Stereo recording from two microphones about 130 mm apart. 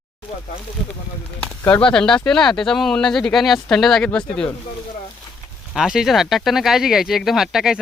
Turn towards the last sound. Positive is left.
turn(degrees=-5)  # may be behind; listen again after turning